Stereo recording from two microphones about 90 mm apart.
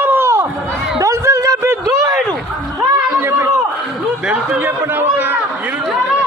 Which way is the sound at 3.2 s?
25° right (ahead or behind).